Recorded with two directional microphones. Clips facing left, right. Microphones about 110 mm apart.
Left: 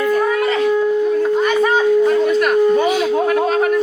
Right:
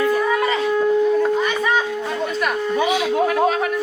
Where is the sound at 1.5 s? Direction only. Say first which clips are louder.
Left 6 dB; 45° left (ahead or behind).